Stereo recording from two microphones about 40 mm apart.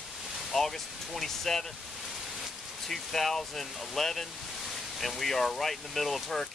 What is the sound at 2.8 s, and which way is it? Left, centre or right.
Speech, centre.